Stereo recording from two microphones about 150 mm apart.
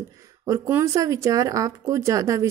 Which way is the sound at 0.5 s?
20° right (ahead or behind).